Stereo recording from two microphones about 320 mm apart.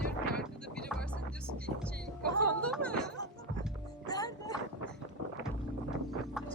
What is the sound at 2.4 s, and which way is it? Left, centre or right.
Music, right.